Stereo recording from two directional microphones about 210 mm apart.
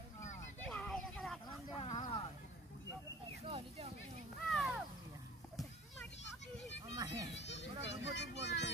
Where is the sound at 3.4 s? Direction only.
25° right (ahead or behind).